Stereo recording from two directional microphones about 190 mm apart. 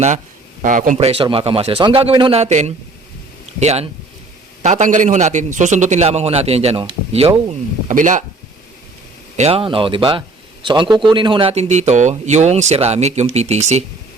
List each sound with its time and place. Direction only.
0.6 s speech: 45° right (ahead or behind)
7.9 s speech: 40° right (ahead or behind)
9.4 s speech: 30° right (ahead or behind)